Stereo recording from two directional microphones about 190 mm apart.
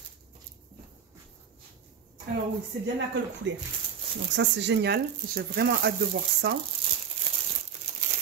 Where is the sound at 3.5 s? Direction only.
75° right (ahead or behind).